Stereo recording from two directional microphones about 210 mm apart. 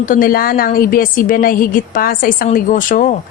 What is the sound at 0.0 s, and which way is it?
A woman's voice, 40° left (ahead or behind).